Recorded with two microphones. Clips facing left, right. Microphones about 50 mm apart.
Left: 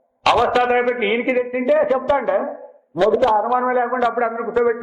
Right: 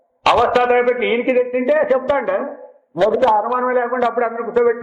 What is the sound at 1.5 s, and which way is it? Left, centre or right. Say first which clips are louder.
Speech: right 1 dB; right.